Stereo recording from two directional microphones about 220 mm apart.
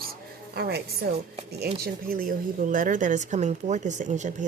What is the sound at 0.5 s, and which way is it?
A woman's voice, 45° right (ahead or behind).